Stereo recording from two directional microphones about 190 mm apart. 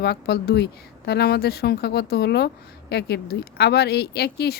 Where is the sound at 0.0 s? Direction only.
60° left (ahead or behind).